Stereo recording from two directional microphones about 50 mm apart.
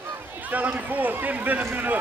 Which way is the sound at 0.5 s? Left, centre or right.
Right.